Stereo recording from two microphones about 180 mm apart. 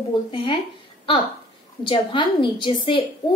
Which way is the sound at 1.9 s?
25° left (ahead or behind).